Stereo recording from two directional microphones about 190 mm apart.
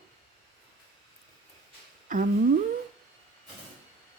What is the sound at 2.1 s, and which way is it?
Humming, 45° right (ahead or behind).